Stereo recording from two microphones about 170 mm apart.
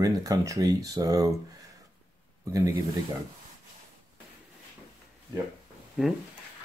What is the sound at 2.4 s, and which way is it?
Speech, 20° right (ahead or behind).